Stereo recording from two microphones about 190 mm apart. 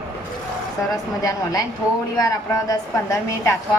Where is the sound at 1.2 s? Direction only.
20° left (ahead or behind).